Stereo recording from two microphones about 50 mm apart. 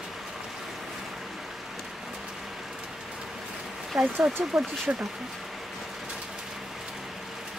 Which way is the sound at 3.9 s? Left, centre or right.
Centre.